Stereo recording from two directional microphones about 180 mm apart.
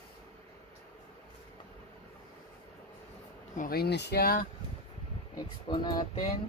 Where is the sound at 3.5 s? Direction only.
50° left (ahead or behind).